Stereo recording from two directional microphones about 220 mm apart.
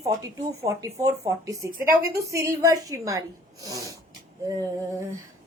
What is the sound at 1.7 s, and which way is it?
Speech, 40° right (ahead or behind).